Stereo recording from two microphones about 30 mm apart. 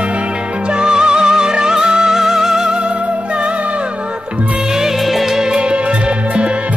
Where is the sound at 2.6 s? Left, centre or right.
Right.